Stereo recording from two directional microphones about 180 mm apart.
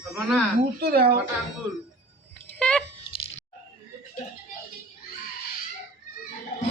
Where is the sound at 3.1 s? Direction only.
35° left (ahead or behind).